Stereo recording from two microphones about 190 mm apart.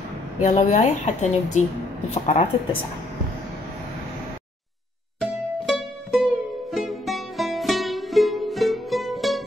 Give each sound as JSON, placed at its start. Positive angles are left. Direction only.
{"t": 0.4, "sound": "speech", "side_deg": 40}
{"t": 5.2, "sound": "music", "side_deg": 0}